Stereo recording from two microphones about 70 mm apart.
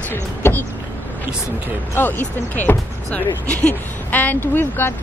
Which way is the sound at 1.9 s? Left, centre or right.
Left.